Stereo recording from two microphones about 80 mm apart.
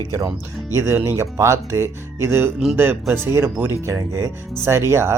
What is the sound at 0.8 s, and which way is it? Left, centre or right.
Speech, right.